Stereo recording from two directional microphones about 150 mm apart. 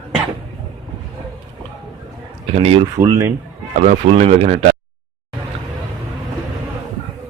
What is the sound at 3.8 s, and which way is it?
Speech, 50° right (ahead or behind).